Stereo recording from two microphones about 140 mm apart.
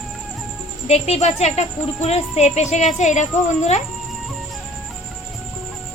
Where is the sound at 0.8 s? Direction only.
50° left (ahead or behind).